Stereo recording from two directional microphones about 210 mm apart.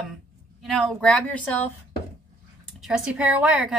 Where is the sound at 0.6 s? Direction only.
Centre (ahead or behind).